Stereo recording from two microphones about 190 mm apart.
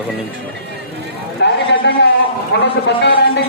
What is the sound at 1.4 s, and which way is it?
Speech, 60° left (ahead or behind).